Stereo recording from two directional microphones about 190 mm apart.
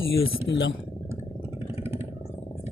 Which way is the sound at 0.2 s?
80° left.